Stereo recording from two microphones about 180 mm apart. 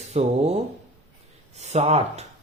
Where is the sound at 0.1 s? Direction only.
35° right (ahead or behind).